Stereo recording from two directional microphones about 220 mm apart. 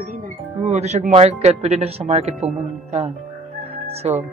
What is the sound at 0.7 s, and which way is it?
Speech, 30° right (ahead or behind).